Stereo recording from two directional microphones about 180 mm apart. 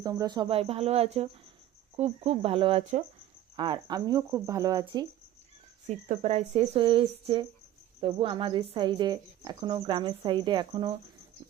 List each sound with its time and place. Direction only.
0.0 s a woman's voice: 20° right (ahead or behind)
5.8 s a woman's voice: 40° right (ahead or behind)